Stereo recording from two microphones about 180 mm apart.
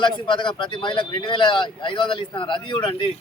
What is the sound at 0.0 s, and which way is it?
Speech, 25° left (ahead or behind).